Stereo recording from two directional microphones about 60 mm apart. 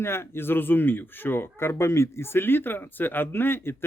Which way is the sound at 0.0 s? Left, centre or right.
Left.